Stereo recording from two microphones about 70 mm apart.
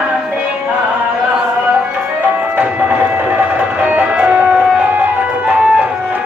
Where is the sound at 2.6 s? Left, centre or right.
Right.